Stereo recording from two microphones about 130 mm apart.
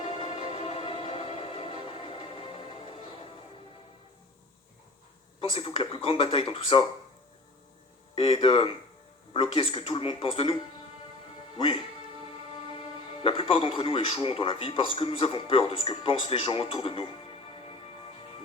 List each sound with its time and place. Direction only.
0.3 s music: 45° right (ahead or behind)
0.6 s music: 50° left (ahead or behind)
5.4 s a man's voice: 45° left (ahead or behind)
8.1 s a man's voice: 50° left (ahead or behind)